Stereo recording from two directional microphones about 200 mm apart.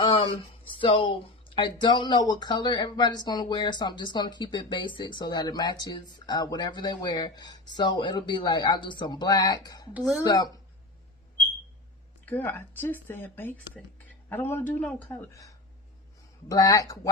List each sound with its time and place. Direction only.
0.0 s speech: 25° left (ahead or behind)
9.9 s speech: centre (ahead or behind)
10.2 s speech: 20° left (ahead or behind)
12.2 s speech: 10° left (ahead or behind)